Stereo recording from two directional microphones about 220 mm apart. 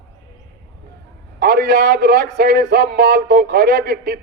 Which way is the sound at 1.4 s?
50° right (ahead or behind).